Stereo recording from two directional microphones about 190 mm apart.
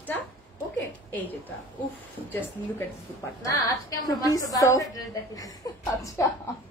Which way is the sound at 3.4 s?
20° left (ahead or behind).